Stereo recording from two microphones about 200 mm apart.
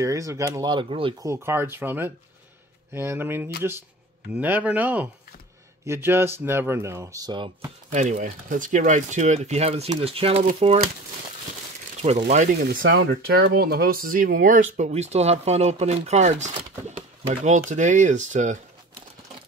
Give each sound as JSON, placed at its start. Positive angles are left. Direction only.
{"t": 0.0, "sound": "speech", "side_deg": -15}
{"t": 1.2, "sound": "speech", "side_deg": -15}
{"t": 7.9, "sound": "speech", "side_deg": -40}
{"t": 12.3, "sound": "speech", "side_deg": -35}
{"t": 12.5, "sound": "speech", "side_deg": -50}